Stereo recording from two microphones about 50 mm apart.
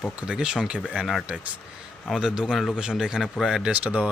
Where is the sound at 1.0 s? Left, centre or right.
Centre.